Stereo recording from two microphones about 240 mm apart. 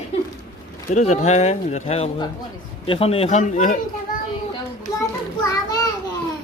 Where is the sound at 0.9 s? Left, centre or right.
Left.